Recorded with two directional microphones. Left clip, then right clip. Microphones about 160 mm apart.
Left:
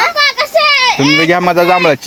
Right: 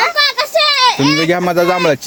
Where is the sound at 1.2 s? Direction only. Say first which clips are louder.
Left 3 dB; 20° right (ahead or behind).